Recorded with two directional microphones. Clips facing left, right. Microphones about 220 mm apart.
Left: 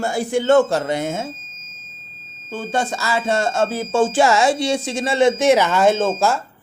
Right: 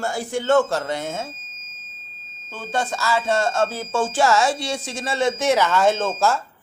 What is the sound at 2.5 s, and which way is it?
Speech, 15° left (ahead or behind).